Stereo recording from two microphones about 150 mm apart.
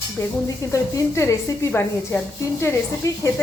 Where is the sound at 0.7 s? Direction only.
20° left (ahead or behind).